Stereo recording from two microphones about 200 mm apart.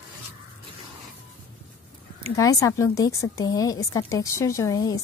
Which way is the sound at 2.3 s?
15° left (ahead or behind).